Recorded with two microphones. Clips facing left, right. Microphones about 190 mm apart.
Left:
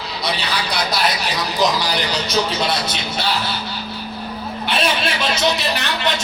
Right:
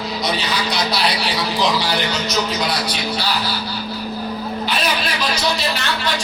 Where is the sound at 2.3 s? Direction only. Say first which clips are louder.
Left 3 dB; 25° left (ahead or behind).